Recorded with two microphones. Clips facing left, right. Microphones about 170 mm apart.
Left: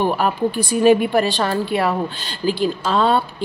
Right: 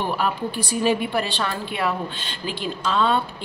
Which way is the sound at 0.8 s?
45° left (ahead or behind).